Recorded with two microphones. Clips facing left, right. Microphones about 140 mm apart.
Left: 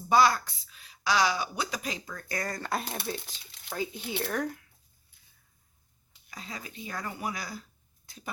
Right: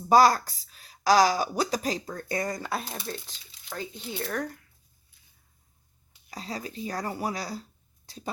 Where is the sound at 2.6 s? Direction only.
Centre (ahead or behind).